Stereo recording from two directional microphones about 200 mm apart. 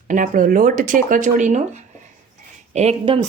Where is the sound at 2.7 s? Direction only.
35° right (ahead or behind).